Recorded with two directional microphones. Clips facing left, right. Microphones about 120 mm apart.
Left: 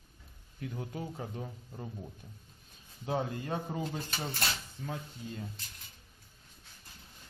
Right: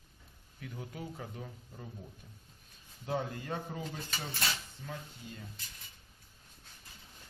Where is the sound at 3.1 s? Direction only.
30° left (ahead or behind).